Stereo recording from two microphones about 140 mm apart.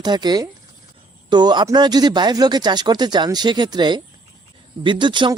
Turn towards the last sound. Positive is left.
turn(degrees=-35)  # may be behind; listen again after turning